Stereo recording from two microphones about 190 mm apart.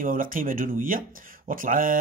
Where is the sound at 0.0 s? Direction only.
45° right (ahead or behind).